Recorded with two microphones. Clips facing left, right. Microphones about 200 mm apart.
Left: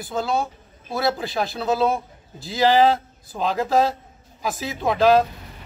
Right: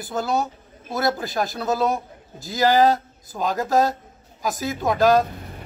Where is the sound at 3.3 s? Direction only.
Centre (ahead or behind).